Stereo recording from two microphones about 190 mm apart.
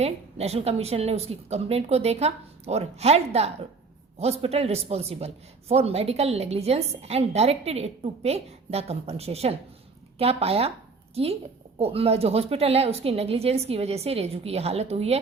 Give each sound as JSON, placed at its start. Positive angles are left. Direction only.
{"t": 0.0, "sound": "a man's voice", "side_deg": -35}